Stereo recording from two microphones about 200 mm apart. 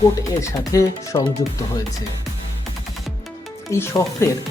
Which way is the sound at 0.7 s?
20° left (ahead or behind).